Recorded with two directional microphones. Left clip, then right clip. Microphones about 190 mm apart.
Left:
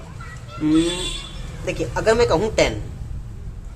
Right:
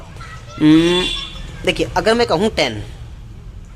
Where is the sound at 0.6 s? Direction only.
30° right (ahead or behind).